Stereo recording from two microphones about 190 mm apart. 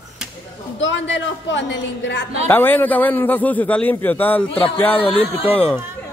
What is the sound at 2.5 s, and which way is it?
A man's voice, 10° left (ahead or behind).